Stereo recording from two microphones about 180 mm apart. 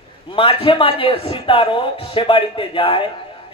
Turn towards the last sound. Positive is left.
turn(degrees=30)  # may be behind; listen again after turning